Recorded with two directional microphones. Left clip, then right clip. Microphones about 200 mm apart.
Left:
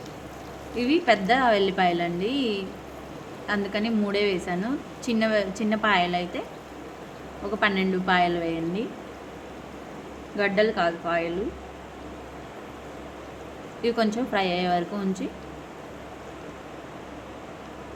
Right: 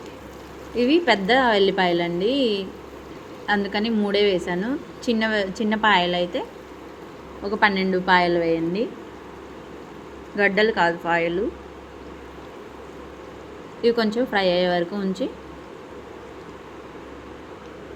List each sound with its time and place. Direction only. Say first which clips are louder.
0.8 s a woman's voice: right 3 dB; 10° right (ahead or behind)
7.4 s a woman's voice: right 4 dB; 10° right (ahead or behind)
10.3 s a woman's voice: right 4 dB; 15° right (ahead or behind)
13.8 s a woman's voice: right 5 dB; 10° right (ahead or behind)